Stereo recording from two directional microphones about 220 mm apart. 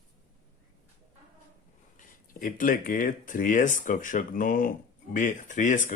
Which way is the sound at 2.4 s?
35° left (ahead or behind).